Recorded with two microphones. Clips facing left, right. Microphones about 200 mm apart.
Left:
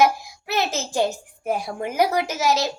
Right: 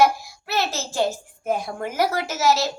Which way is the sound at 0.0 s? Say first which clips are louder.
Even; 15° left (ahead or behind).